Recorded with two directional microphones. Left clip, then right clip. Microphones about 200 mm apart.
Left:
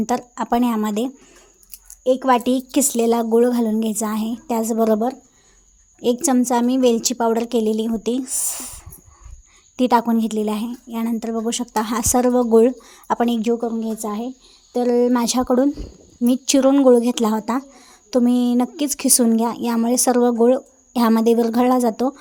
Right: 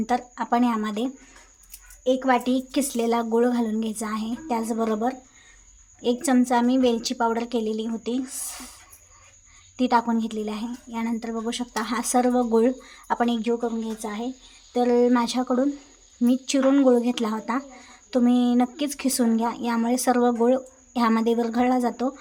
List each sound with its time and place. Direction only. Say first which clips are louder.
0.0 s speech: left 3 dB; 45° left (ahead or behind)